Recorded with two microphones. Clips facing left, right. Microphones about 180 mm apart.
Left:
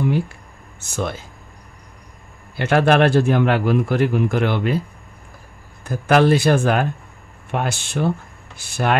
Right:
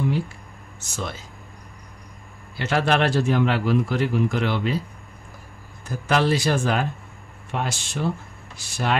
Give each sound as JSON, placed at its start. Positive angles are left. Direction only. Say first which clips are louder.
{"t": 0.7, "sound": "speech", "louder": "left 7 dB", "side_deg": 60}
{"t": 2.5, "sound": "speech", "louder": "left 6 dB", "side_deg": 60}
{"t": 5.9, "sound": "speech", "louder": "left 6 dB", "side_deg": 60}